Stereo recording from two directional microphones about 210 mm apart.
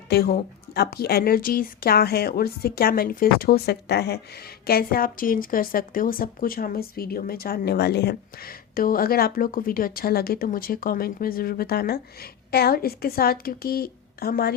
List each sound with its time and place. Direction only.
0.1 s speech: 50° left (ahead or behind)